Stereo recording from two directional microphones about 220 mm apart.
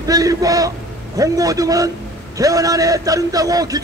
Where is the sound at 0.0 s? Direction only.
15° right (ahead or behind).